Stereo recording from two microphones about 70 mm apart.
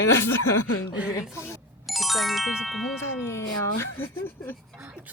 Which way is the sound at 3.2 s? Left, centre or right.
Left.